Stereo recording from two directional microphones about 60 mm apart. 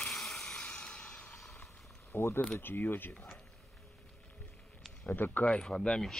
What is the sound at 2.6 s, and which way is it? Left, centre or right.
Speech, left.